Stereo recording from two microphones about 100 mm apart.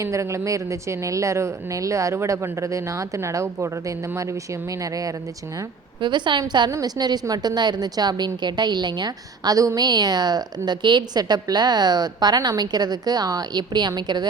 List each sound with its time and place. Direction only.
0.0 s speech: 30° right (ahead or behind)
6.0 s a woman's voice: 50° right (ahead or behind)